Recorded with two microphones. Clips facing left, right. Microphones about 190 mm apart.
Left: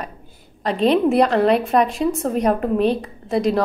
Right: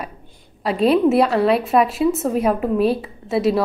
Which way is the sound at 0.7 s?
5° right (ahead or behind).